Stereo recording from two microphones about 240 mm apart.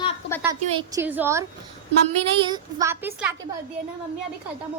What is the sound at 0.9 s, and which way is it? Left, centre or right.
A woman's voice, centre.